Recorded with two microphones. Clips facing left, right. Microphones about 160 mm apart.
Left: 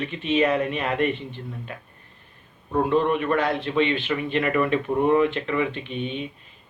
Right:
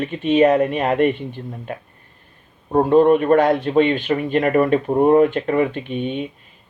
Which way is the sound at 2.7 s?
45° right (ahead or behind).